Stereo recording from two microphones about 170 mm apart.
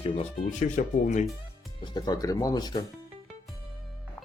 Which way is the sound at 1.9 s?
25° left (ahead or behind).